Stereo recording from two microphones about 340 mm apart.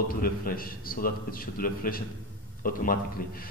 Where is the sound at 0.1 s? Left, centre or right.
Left.